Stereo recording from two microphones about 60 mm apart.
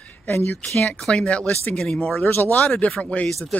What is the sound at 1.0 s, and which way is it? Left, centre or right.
Speech, centre.